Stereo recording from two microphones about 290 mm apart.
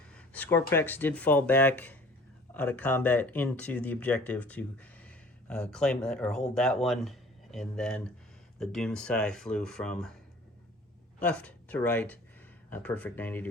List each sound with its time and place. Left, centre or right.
0.1 s a sound: centre
0.7 s speech: centre
11.2 s speech: centre